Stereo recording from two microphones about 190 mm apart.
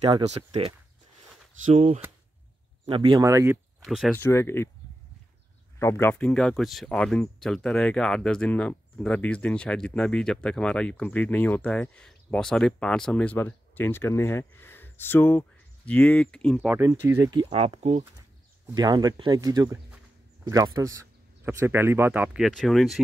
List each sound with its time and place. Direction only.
0.5 s speech: 30° right (ahead or behind)
2.9 s speech: 20° right (ahead or behind)
3.8 s speech: centre (ahead or behind)
4.1 s speech: 15° left (ahead or behind)
5.8 s speech: 10° left (ahead or behind)
16.7 s speech: 15° right (ahead or behind)
17.5 s speech: 35° right (ahead or behind)
18.8 s speech: 20° right (ahead or behind); by 23.0 s centre (ahead or behind)